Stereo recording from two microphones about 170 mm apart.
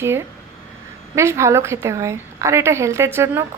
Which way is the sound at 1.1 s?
15° right (ahead or behind).